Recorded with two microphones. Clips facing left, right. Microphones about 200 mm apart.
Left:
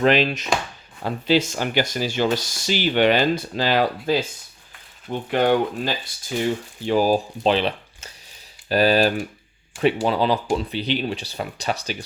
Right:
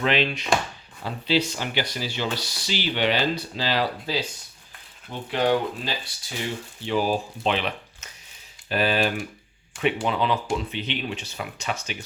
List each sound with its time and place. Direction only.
0.0 s speech: 45° left (ahead or behind)
5.3 s speech: 55° left (ahead or behind)
6.8 s speech: 40° left (ahead or behind)